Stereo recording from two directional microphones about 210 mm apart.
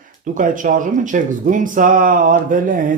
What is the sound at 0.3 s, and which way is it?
Speech, 40° right (ahead or behind).